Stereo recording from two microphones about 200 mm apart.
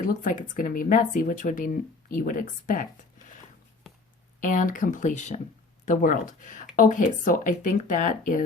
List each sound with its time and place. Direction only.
0.0 s speech: 40° left (ahead or behind)
3.9 s a sound: centre (ahead or behind)
4.4 s speech: 40° left (ahead or behind)